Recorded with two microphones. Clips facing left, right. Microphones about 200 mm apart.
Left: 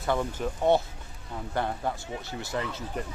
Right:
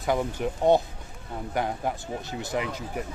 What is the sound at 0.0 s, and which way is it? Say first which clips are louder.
Speech: right 2 dB; 15° right (ahead or behind).